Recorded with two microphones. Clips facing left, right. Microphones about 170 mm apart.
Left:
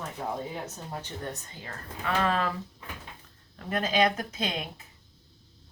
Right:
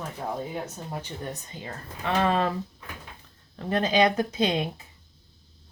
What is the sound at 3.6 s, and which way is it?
Speech, 30° right (ahead or behind).